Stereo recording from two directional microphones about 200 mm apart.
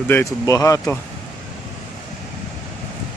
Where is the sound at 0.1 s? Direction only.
15° left (ahead or behind).